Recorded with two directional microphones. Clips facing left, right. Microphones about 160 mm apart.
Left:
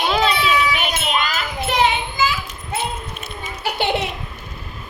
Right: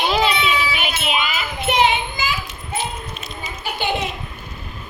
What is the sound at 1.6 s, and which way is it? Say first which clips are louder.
Child singing: right 1 dB; 20° right (ahead or behind).